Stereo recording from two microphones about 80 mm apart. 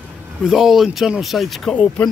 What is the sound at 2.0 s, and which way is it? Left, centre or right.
Speech, centre.